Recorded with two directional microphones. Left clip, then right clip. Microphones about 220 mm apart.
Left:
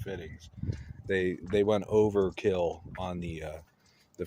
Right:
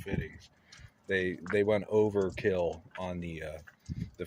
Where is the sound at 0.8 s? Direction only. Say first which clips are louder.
Left 1 dB; 30° left (ahead or behind).